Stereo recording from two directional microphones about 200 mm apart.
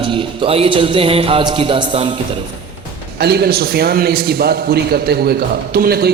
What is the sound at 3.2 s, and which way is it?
A man's voice, 55° right (ahead or behind).